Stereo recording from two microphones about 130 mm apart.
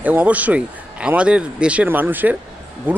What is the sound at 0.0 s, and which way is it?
Speech, 10° right (ahead or behind).